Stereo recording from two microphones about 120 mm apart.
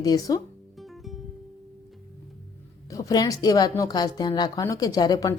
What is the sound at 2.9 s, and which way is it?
A woman's voice, 30° left (ahead or behind).